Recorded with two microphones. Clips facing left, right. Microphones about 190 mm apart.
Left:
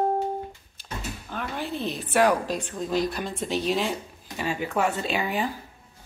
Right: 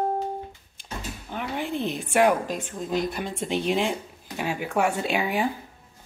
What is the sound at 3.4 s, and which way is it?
Speech, 55° right (ahead or behind).